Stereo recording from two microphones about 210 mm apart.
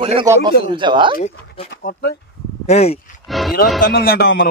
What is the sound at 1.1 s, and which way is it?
Speech, 30° left (ahead or behind).